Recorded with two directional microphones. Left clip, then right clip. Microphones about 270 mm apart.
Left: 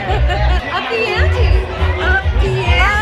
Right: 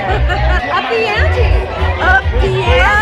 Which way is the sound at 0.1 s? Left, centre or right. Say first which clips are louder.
Right 3 dB; centre.